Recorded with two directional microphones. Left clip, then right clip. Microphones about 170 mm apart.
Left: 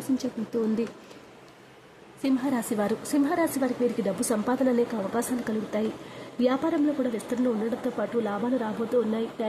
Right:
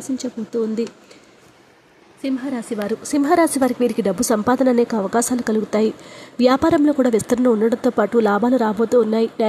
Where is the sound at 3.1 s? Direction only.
40° right (ahead or behind).